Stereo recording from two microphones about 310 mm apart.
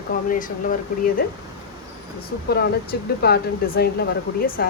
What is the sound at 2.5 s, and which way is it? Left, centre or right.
Speech, left.